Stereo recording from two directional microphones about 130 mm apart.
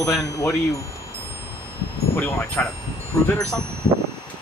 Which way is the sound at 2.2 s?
15° left (ahead or behind).